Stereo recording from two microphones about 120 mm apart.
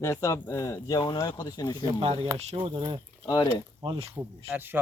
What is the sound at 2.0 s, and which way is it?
Speech, 55° right (ahead or behind).